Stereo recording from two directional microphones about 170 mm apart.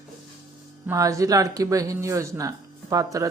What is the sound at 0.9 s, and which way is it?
Speech, 20° right (ahead or behind).